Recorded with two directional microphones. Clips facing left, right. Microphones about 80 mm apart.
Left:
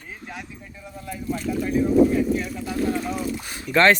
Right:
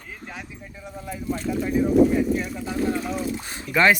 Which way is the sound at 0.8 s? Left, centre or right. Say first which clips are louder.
Right 1 dB; centre.